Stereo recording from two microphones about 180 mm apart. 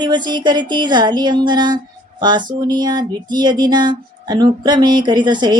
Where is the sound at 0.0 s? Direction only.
25° right (ahead or behind).